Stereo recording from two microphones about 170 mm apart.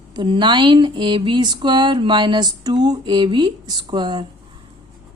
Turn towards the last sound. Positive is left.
turn(degrees=-25)  # may be behind; listen again after turning